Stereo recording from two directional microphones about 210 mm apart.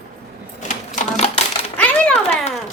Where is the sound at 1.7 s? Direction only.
5° left (ahead or behind).